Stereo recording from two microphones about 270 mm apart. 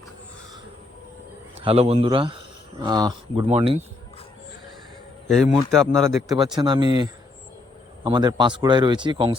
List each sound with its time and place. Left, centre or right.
1.6 s speech: right
5.4 s a man's voice: centre
6.1 s speech: centre